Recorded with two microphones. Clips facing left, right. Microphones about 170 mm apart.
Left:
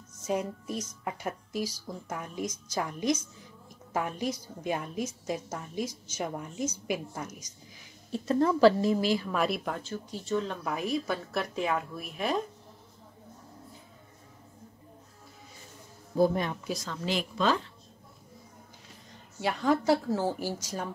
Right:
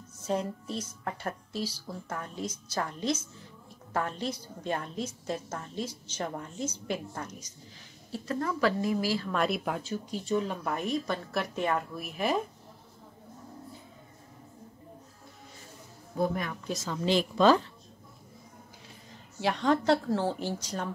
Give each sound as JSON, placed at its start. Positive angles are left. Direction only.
{"t": 0.2, "sound": "music", "side_deg": 10}
{"t": 1.0, "sound": "a woman's voice", "side_deg": 10}
{"t": 8.1, "sound": "a woman's voice", "side_deg": 25}
{"t": 9.3, "sound": "speech", "side_deg": 0}
{"t": 10.6, "sound": "a woman's voice", "side_deg": 5}
{"t": 16.2, "sound": "a woman's voice", "side_deg": 25}
{"t": 16.6, "sound": "a woman's voice", "side_deg": 0}
{"t": 17.0, "sound": "a woman's voice", "side_deg": -30}
{"t": 19.4, "sound": "a woman's voice", "side_deg": 5}